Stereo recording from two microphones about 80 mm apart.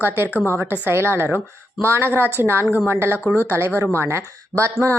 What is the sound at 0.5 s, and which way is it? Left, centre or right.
A woman's voice, right.